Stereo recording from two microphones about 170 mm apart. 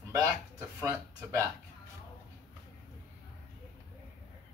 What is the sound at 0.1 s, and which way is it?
Speech, 15° right (ahead or behind).